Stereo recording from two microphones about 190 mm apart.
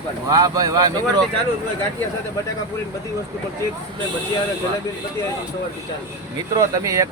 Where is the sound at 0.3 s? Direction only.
20° right (ahead or behind).